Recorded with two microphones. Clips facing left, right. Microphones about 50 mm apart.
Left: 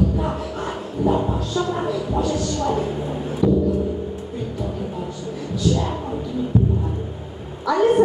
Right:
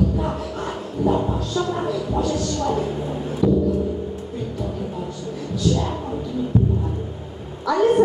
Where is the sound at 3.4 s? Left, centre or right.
Left.